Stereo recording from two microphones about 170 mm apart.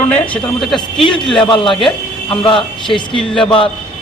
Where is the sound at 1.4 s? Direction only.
30° left (ahead or behind).